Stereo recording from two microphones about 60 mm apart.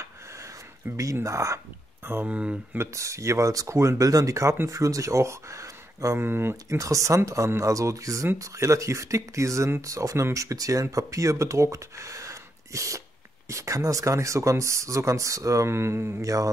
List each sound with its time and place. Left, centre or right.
0.0 s a sound: right
1.2 s speech: right
2.2 s speech: right
2.8 s speech: right
4.0 s speech: right
6.1 s speech: right
6.7 s speech: right
15.7 s a sound: right
16.2 s music: right